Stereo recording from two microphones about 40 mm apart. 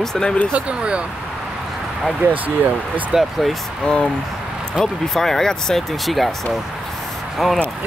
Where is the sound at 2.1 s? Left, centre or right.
Right.